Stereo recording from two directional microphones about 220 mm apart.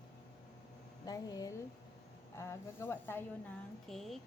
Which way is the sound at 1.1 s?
15° left (ahead or behind).